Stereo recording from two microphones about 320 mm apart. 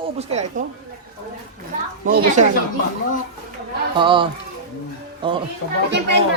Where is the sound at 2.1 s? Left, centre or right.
Right.